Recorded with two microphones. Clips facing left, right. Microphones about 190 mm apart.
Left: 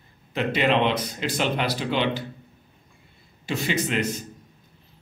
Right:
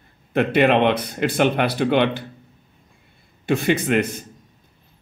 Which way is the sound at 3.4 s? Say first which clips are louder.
Right 7 dB; 55° right (ahead or behind).